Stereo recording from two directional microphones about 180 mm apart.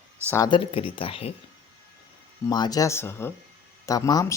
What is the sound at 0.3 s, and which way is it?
Speech, 20° left (ahead or behind).